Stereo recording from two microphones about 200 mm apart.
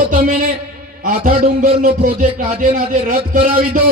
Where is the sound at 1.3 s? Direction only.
25° right (ahead or behind).